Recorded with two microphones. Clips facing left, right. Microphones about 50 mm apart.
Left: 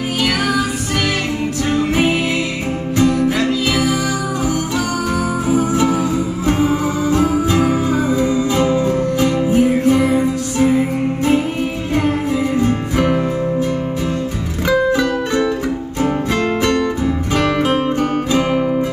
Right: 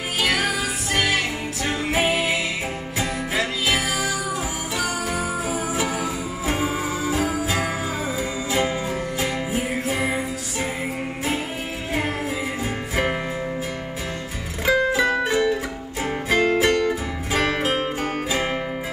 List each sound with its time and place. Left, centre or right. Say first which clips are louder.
0.2 s music: left 4 dB; centre
1.7 s music: left 5 dB; centre
5.5 s music: left 9 dB; centre
12.5 s music: left 9 dB; centre
14.7 s music: left 4 dB; centre